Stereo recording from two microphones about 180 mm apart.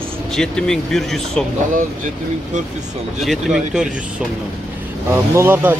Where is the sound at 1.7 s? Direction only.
45° right (ahead or behind).